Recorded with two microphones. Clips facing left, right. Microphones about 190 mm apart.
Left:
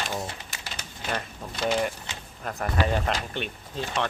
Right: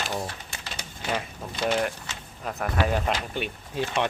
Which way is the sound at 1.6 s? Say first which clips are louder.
Even; 5° right (ahead or behind).